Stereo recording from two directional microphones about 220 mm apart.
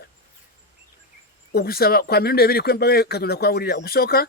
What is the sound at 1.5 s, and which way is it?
Speech, 45° left (ahead or behind).